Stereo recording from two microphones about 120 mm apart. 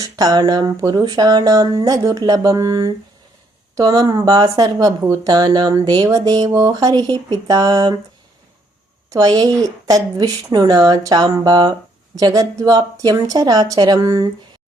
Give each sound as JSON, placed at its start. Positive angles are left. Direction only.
{"t": 0.0, "sound": "speech", "side_deg": -30}
{"t": 9.0, "sound": "speech", "side_deg": -30}